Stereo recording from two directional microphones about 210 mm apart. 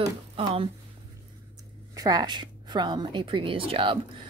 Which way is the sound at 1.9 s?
15° right (ahead or behind).